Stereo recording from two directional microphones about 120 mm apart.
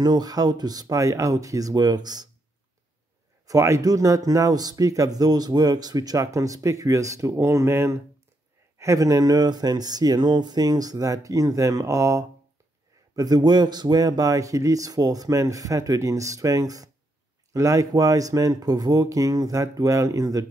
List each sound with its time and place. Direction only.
0.0 s speech: 35° right (ahead or behind)
3.4 s speech: 25° right (ahead or behind)